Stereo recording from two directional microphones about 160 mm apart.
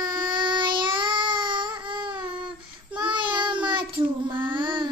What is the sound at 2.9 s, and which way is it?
Child singing, 30° right (ahead or behind).